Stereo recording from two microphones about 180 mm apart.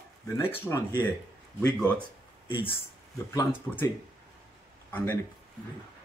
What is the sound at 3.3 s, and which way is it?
Speech, 15° left (ahead or behind).